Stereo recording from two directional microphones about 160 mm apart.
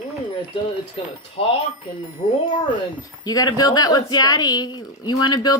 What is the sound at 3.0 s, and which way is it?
Speech, 25° left (ahead or behind).